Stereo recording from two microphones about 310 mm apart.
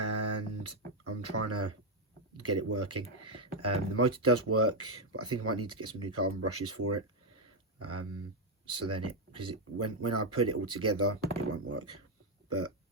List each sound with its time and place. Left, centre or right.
0.0 s music: right
2.4 s speech: right